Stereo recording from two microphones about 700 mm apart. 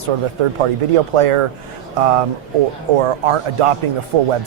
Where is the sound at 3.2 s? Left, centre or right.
Right.